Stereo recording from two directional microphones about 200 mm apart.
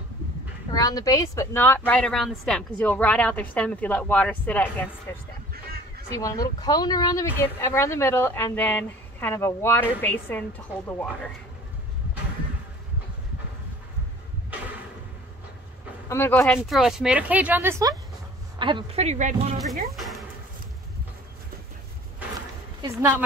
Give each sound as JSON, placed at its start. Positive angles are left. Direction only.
{"t": 0.7, "sound": "a woman's voice", "side_deg": 20}
{"t": 16.1, "sound": "speech", "side_deg": 10}
{"t": 18.6, "sound": "a woman's voice", "side_deg": -25}
{"t": 19.9, "sound": "a sound", "side_deg": 0}
{"t": 22.8, "sound": "speech", "side_deg": -15}